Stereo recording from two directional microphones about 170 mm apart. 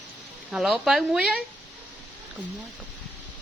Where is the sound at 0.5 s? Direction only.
Centre (ahead or behind).